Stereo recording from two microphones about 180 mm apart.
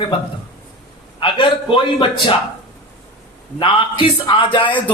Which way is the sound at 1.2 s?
25° left (ahead or behind).